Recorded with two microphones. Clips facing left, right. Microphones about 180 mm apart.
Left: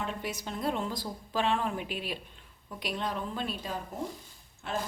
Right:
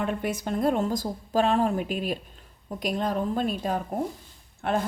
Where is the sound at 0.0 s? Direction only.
55° right (ahead or behind).